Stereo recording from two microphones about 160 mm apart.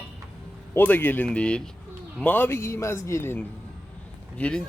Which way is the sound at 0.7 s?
10° left (ahead or behind).